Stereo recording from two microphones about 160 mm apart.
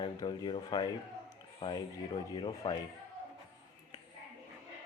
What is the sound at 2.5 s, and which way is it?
Speech, 30° left (ahead or behind).